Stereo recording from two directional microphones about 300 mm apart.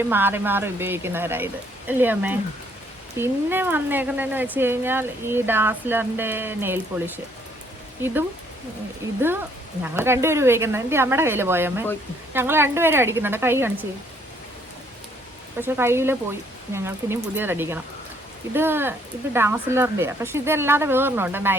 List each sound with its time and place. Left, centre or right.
0.0 s speech: centre
9.0 s speech: centre
15.6 s speech: centre